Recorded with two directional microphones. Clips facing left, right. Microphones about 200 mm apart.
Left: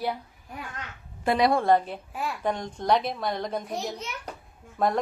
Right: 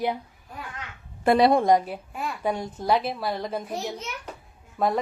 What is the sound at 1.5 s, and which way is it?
Speech, 15° right (ahead or behind).